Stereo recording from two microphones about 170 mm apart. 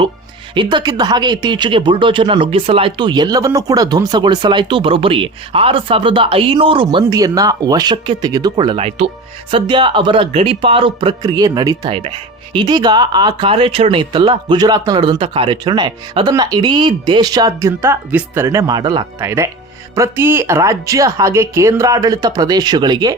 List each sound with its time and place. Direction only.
0.5 s speech: 25° right (ahead or behind)
7.1 s speech: 20° right (ahead or behind)
11.9 s speech: 35° right (ahead or behind)